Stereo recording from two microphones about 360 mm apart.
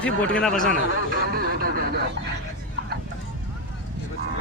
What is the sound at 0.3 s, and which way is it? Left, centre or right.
Speech, centre.